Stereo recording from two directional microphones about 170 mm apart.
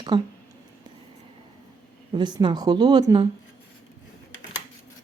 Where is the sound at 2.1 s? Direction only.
25° right (ahead or behind).